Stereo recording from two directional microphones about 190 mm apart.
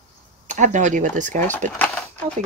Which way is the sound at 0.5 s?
40° right (ahead or behind).